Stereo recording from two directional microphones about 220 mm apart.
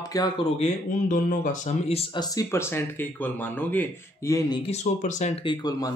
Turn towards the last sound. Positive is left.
turn(degrees=15)  # may be behind; listen again after turning